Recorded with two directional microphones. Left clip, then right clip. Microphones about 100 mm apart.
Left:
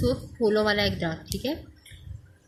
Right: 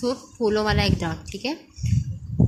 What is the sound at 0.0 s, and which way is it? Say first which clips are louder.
A woman's voice: right 1 dB; 20° right (ahead or behind).